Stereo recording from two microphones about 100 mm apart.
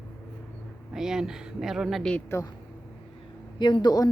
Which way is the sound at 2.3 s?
25° left (ahead or behind).